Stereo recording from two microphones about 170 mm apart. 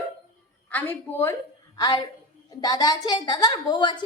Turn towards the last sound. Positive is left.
turn(degrees=25)  # may be behind; listen again after turning